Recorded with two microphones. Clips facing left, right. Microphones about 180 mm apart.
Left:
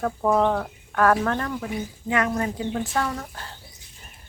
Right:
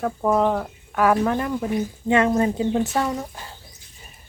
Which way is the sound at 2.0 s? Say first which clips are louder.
Right 6 dB; 25° right (ahead or behind).